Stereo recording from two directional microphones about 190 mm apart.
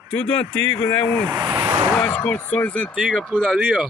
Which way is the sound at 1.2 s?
25° right (ahead or behind).